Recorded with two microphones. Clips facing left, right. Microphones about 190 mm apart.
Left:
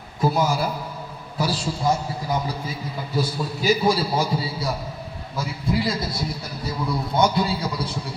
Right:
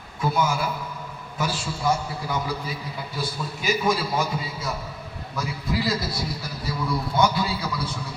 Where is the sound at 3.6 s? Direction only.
35° left (ahead or behind).